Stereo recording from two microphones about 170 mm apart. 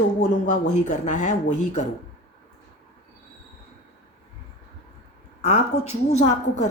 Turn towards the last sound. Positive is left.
turn(degrees=45)  # may be behind; listen again after turning